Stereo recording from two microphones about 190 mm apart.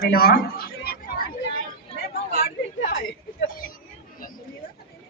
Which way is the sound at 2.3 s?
50° left (ahead or behind).